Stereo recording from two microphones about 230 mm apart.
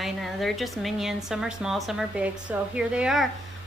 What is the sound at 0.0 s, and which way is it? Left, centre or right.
A woman's voice, centre.